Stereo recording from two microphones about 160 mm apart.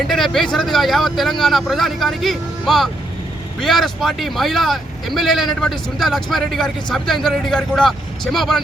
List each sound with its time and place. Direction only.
0.1 s speech: centre (ahead or behind)